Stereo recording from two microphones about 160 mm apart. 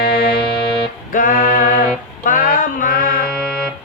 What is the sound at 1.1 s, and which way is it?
Music, 60° left (ahead or behind).